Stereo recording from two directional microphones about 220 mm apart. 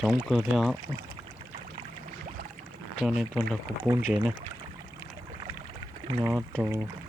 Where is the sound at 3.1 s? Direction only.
Centre (ahead or behind).